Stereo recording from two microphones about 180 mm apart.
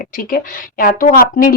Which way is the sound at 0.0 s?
50° left (ahead or behind).